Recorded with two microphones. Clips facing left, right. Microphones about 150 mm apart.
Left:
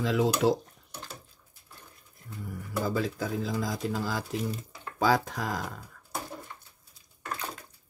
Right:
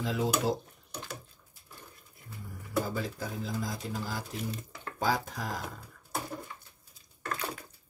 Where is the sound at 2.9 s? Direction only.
90° left.